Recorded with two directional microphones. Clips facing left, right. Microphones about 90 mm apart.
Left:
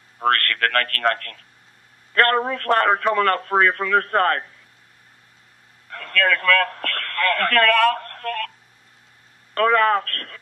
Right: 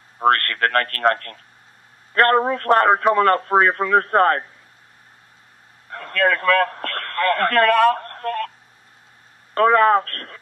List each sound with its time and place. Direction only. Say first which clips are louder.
0.2 s speech: right 3 dB; 25° right (ahead or behind)
5.9 s a man's voice: right 1 dB; 25° right (ahead or behind)
9.5 s speech: right 3 dB; 25° right (ahead or behind)